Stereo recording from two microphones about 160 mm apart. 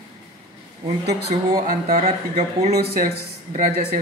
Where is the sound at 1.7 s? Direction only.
45° right (ahead or behind).